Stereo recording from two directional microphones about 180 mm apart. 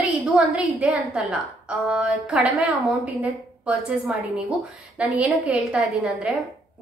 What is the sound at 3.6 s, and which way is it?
A woman's voice, 5° right (ahead or behind).